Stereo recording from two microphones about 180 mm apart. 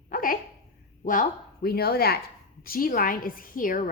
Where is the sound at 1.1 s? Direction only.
50° left (ahead or behind).